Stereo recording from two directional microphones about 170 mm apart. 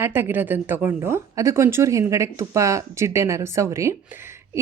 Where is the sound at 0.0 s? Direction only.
10° right (ahead or behind).